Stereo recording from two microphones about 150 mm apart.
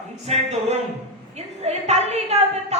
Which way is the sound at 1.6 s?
45° right (ahead or behind).